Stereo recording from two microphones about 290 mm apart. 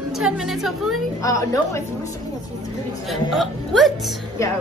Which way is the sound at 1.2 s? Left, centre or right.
Centre.